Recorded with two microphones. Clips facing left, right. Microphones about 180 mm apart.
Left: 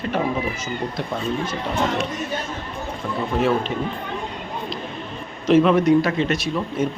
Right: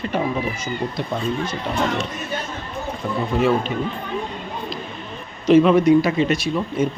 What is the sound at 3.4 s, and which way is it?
Speech, centre (ahead or behind).